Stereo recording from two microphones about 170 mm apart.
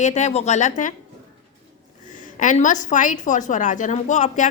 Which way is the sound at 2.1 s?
50° left (ahead or behind).